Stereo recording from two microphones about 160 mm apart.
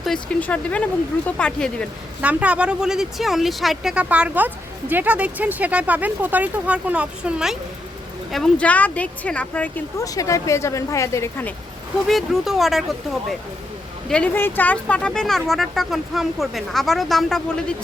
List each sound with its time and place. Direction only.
0.0 s speech: 5° left (ahead or behind)
2.2 s speech: 10° right (ahead or behind)
8.3 s speech: 5° left (ahead or behind)
10.0 s speech: 20° left (ahead or behind)
12.0 s speech: centre (ahead or behind)
14.1 s speech: 10° left (ahead or behind)